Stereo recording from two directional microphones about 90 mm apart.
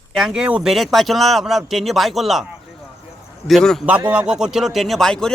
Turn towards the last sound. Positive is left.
turn(degrees=5)  # may be behind; listen again after turning